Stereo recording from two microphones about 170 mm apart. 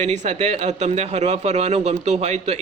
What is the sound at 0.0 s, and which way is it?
Speech, 40° right (ahead or behind).